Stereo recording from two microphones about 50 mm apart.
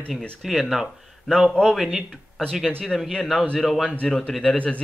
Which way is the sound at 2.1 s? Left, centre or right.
Centre.